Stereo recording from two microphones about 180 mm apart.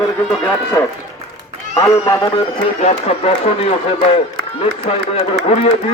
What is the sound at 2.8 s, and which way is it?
A man's voice, 35° left (ahead or behind).